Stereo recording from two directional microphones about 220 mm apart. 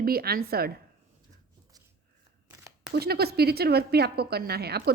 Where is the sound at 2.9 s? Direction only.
45° right (ahead or behind).